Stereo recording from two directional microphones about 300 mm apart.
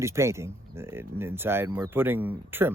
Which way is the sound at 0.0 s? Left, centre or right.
Centre.